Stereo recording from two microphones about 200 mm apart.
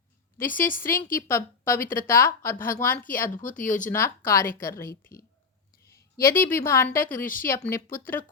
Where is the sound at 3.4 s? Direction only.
40° left (ahead or behind).